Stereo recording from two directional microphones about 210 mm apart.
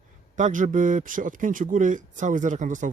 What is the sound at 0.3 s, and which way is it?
Speech, 35° right (ahead or behind).